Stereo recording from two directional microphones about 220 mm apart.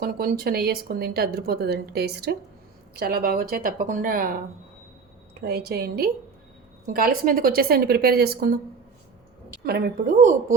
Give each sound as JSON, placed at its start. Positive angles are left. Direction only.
{"t": 0.0, "sound": "speech", "side_deg": -40}
{"t": 9.6, "sound": "speech", "side_deg": -45}